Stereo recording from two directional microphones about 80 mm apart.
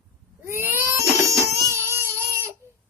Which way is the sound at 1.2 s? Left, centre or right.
Right.